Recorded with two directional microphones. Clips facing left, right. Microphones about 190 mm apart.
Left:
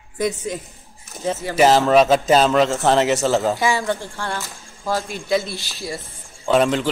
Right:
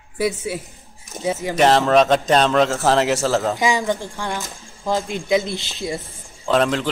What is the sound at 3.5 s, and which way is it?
Speech, 15° right (ahead or behind).